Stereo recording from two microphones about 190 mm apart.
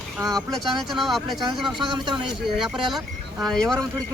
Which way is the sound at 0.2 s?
15° right (ahead or behind).